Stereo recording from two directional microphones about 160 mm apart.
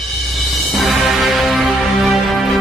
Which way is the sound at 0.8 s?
Centre (ahead or behind).